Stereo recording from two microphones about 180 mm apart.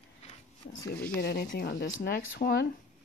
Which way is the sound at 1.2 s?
60° left (ahead or behind).